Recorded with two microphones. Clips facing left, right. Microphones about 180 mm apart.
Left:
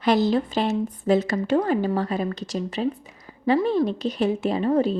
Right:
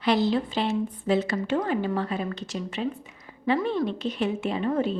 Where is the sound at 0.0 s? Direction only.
45° left (ahead or behind).